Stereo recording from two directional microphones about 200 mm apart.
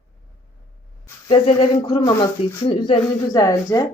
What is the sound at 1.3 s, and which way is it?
Speech, 25° left (ahead or behind).